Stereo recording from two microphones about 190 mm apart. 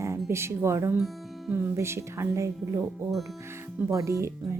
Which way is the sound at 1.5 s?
15° right (ahead or behind).